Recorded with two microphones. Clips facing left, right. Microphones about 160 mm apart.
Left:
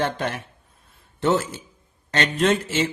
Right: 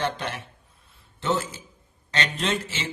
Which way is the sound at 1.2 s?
60° left (ahead or behind).